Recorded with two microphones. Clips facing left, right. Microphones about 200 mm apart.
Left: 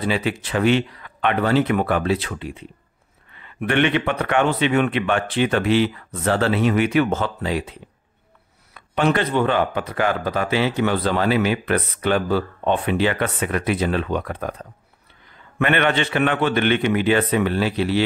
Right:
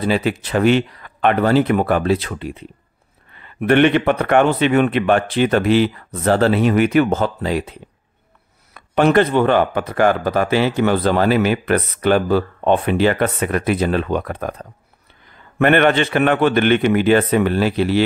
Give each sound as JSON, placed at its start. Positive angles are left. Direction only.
{"t": 0.0, "sound": "speech", "side_deg": -40}
{"t": 8.7, "sound": "speech", "side_deg": -45}
{"t": 15.6, "sound": "speech", "side_deg": -45}